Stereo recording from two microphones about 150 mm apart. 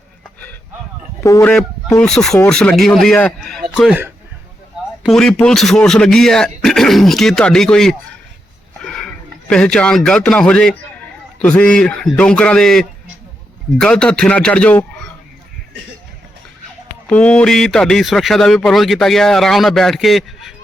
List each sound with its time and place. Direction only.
1.2 s speech: 20° left (ahead or behind)
2.0 s a man's voice: 5° left (ahead or behind)
5.0 s a man's voice: 5° left (ahead or behind)
17.1 s a man's voice: 10° left (ahead or behind)